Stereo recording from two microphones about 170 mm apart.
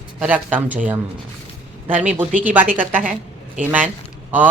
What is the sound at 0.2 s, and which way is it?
Speech, 10° right (ahead or behind).